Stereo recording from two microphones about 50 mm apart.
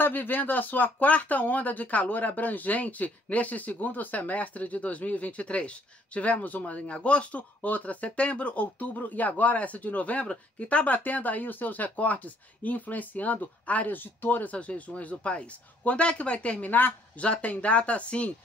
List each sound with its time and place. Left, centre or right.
0.0 s speech: left